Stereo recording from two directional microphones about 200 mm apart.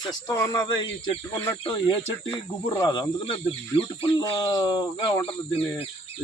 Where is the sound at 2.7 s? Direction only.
20° left (ahead or behind).